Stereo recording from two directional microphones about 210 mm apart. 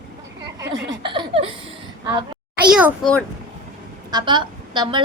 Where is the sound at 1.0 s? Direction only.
25° right (ahead or behind).